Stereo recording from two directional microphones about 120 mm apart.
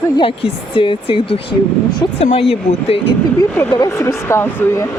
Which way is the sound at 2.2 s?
60° left (ahead or behind).